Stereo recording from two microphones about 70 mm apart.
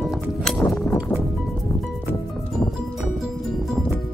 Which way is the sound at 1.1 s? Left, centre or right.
Left.